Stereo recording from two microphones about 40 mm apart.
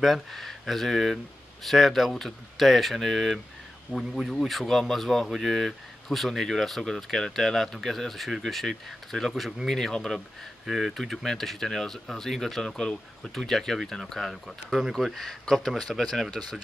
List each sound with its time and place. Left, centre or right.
0.0 s speech: centre
3.9 s speech: right
4.5 s speech: centre
10.7 s speech: centre
14.7 s speech: centre
15.0 s speech: centre